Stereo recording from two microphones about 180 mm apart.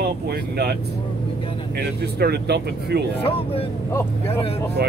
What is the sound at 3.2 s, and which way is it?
Speech, 30° left (ahead or behind).